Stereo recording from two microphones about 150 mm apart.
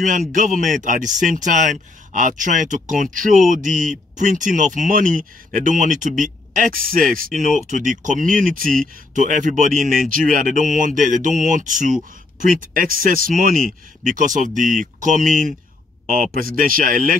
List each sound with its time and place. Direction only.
0.3 s speech: 60° right (ahead or behind)
16.3 s speech: 70° right (ahead or behind)